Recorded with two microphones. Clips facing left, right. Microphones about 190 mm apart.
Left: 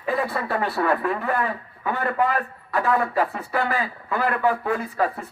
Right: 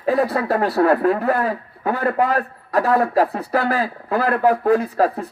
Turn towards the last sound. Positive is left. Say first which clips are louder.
# right 6 dB
turn(degrees=-35)  # may be behind; listen again after turning